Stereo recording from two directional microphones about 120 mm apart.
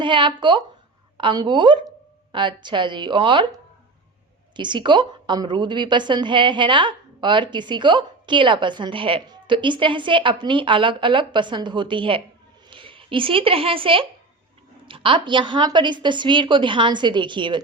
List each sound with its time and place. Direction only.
0.0 s a woman's voice: 40° right (ahead or behind)